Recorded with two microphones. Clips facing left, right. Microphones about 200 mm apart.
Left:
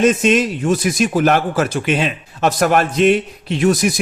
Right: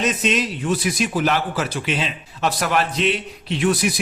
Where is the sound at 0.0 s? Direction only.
50° left (ahead or behind).